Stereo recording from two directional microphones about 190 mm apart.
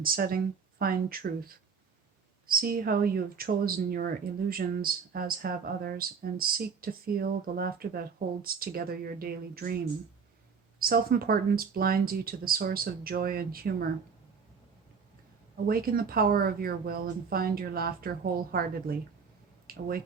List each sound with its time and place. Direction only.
0.0 s speech: 50° right (ahead or behind)
2.5 s speech: 50° right (ahead or behind)
10.8 s speech: 50° right (ahead or behind)
15.6 s speech: 50° right (ahead or behind)